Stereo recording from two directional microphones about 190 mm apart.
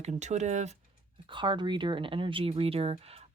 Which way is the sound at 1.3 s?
25° right (ahead or behind).